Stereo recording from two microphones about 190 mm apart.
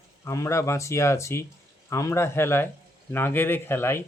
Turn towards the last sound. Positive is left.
turn(degrees=15)  # may be behind; listen again after turning